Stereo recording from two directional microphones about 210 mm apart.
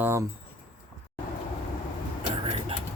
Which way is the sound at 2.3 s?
25° right (ahead or behind).